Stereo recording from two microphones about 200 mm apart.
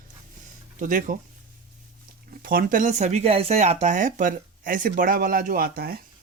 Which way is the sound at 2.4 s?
45° right (ahead or behind).